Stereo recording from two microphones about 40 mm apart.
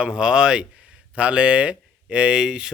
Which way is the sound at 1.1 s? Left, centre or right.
Right.